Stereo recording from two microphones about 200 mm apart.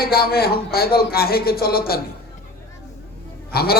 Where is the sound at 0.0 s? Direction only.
50° left (ahead or behind).